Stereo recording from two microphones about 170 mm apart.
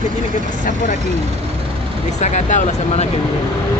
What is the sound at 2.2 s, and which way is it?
Speech, 45° left (ahead or behind).